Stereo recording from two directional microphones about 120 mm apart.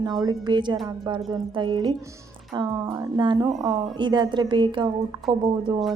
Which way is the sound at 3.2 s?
40° right (ahead or behind).